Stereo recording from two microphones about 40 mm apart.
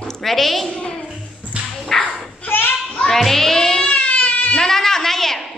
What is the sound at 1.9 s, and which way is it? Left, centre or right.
Bow-wow, centre.